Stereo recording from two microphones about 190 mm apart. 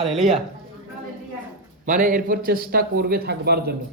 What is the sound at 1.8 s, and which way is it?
A man's voice, 45° right (ahead or behind).